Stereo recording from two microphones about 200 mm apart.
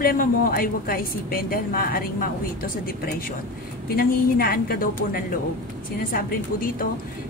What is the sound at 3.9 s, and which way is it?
A woman's voice, 50° left (ahead or behind).